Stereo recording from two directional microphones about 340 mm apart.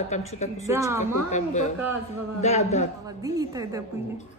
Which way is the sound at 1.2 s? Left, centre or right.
Left.